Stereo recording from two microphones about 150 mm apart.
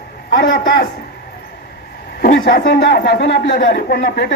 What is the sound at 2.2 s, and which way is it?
Speech, 80° left.